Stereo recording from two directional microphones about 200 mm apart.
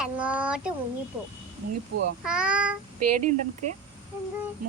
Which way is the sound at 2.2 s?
5° right (ahead or behind).